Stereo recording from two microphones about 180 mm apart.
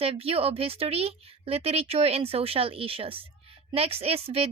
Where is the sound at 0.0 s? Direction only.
30° right (ahead or behind).